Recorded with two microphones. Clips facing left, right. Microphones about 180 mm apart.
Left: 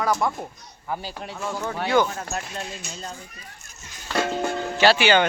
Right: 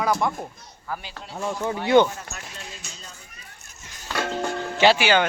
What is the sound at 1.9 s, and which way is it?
Speech, 25° right (ahead or behind).